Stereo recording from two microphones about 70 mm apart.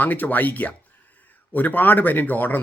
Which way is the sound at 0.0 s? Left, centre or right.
Left.